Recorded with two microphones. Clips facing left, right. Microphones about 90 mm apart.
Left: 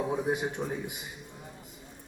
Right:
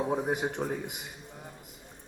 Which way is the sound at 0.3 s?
55° right (ahead or behind).